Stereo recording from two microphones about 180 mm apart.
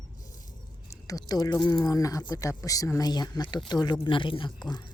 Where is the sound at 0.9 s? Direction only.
20° left (ahead or behind).